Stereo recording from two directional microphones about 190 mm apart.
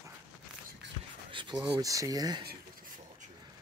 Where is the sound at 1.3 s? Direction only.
25° right (ahead or behind).